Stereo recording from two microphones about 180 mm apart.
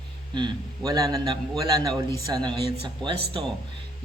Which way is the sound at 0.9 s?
20° right (ahead or behind).